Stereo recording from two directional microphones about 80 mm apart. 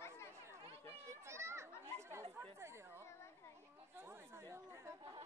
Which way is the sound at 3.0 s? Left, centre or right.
Left.